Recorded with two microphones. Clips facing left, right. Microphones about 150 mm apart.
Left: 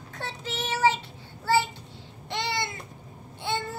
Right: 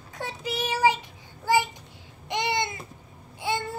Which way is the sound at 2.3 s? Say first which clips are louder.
Right 3 dB; 20° right (ahead or behind).